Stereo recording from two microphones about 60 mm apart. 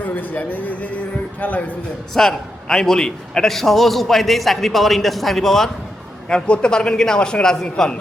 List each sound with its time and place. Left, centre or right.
0.0 s speech: left
2.1 s a man's voice: centre